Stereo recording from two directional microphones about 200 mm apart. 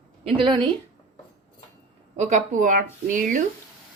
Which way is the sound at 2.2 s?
35° right (ahead or behind).